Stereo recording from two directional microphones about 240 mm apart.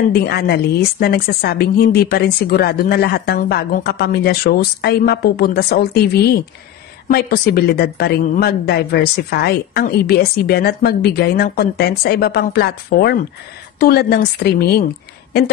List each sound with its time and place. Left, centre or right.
0.1 s a woman's voice: left
7.1 s a woman's voice: left